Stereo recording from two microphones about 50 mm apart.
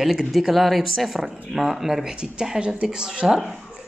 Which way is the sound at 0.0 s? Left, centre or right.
Centre.